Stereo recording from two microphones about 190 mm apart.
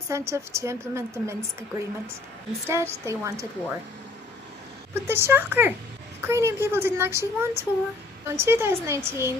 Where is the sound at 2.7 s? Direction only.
15° right (ahead or behind).